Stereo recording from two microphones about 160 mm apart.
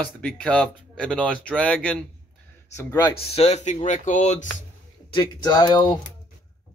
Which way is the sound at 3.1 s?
40° left (ahead or behind).